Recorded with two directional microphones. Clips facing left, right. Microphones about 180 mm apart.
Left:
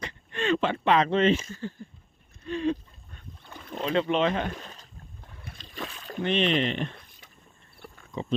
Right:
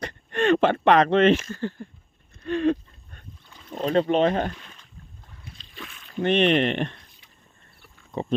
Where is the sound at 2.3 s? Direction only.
70° right (ahead or behind).